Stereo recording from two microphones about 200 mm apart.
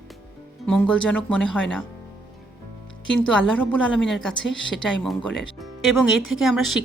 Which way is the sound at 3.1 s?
5° left (ahead or behind).